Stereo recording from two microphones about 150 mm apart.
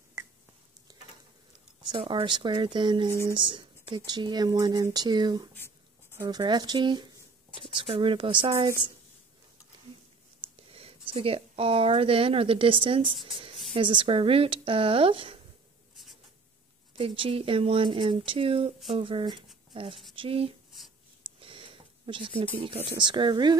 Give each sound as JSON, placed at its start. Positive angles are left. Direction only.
{"t": 0.9, "sound": "stir", "side_deg": -25}
{"t": 1.9, "sound": "speech", "side_deg": -35}
{"t": 10.7, "sound": "speech", "side_deg": -40}
{"t": 16.9, "sound": "speech", "side_deg": -35}
{"t": 21.4, "sound": "a sound", "side_deg": -35}
{"t": 22.6, "sound": "speech", "side_deg": -35}